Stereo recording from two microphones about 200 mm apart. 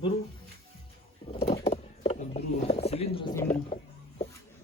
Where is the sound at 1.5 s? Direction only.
30° left (ahead or behind).